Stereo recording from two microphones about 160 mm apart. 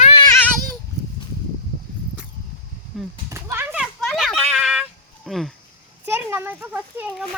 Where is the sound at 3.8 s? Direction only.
Centre (ahead or behind).